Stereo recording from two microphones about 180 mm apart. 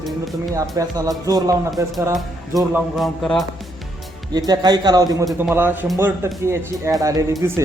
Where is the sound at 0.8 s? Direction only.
20° right (ahead or behind).